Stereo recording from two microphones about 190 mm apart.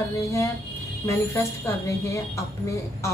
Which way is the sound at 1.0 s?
15° left (ahead or behind).